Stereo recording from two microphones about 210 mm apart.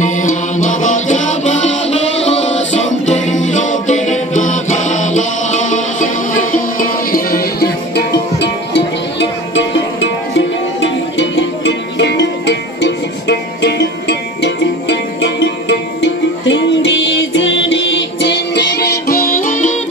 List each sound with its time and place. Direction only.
0.0 s music: 35° left (ahead or behind)